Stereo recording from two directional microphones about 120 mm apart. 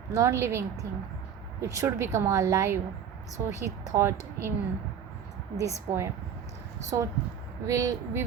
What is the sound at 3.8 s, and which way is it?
Speech, 20° right (ahead or behind).